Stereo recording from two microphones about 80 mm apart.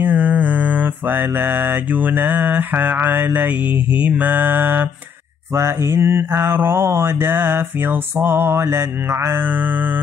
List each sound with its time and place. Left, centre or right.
0.0 s mantra: right
5.5 s mantra: right